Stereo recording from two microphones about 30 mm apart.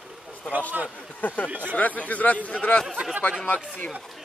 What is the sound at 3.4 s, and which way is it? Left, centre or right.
Speech, left.